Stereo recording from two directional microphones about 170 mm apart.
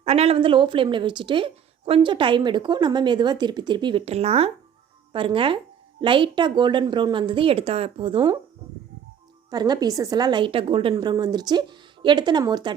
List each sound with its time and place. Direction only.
0.0 s speech: 35° right (ahead or behind)
9.5 s speech: 25° right (ahead or behind)